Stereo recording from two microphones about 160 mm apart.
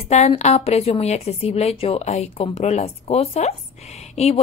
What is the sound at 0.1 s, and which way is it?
A woman's voice, 45° left (ahead or behind).